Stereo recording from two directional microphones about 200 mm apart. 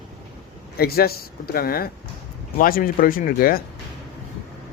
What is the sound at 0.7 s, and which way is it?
Speech, 50° left (ahead or behind).